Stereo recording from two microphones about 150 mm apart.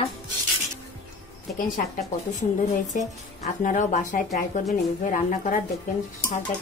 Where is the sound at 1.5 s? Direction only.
65° left (ahead or behind).